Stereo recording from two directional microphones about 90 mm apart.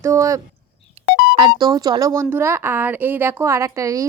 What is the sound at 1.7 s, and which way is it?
Speech, 45° right (ahead or behind).